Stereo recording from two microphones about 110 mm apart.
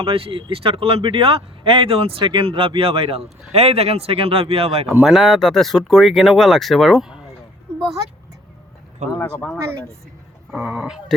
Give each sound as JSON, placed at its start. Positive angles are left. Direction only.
{"t": 0.0, "sound": "speech", "side_deg": -55}
{"t": 5.0, "sound": "speech", "side_deg": 0}
{"t": 9.1, "sound": "speech", "side_deg": 15}
{"t": 10.7, "sound": "speech", "side_deg": -5}